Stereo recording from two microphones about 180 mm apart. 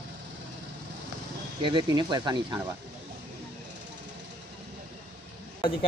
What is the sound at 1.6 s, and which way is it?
Speech, 25° right (ahead or behind).